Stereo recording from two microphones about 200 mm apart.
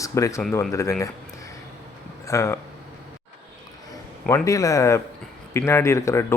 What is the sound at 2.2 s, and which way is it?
Speech, 15° left (ahead or behind).